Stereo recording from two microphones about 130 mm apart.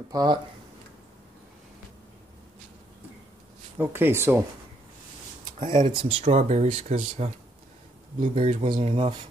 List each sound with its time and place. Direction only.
0.1 s speech: 30° right (ahead or behind)
3.7 s speech: 15° right (ahead or behind)
5.6 s speech: 40° right (ahead or behind)
6.2 s speech: 60° right (ahead or behind); by 9.1 s 40° right (ahead or behind)